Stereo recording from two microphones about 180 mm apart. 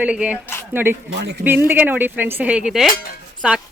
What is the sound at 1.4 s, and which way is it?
A woman's voice, 10° right (ahead or behind).